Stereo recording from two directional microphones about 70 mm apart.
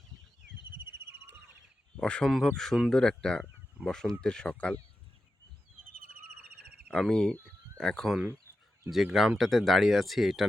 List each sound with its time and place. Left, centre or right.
0.8 s cricket: right
2.0 s speech: centre
2.6 s speech: centre
6.9 s speech: centre